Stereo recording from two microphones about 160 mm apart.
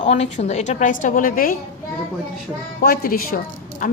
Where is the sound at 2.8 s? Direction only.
70° left (ahead or behind).